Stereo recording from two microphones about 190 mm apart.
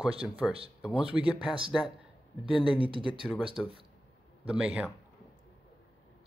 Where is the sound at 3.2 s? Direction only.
Centre (ahead or behind).